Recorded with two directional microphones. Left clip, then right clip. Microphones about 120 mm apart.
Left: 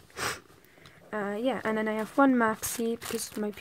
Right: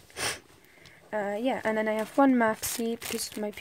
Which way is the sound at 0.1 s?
15° right (ahead or behind).